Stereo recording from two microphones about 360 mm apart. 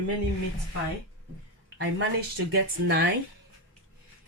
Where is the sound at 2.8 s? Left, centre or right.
Right.